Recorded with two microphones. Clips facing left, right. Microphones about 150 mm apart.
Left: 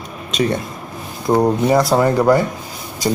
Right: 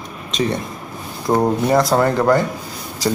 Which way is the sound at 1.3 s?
Centre (ahead or behind).